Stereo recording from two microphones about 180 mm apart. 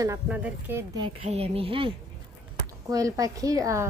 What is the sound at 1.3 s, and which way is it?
A woman's voice, 35° right (ahead or behind).